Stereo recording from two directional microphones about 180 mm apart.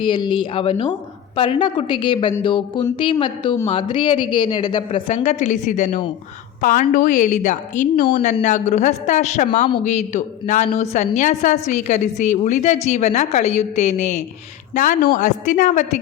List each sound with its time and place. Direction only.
0.0 s a woman's voice: 25° left (ahead or behind); by 16.0 s 45° left (ahead or behind)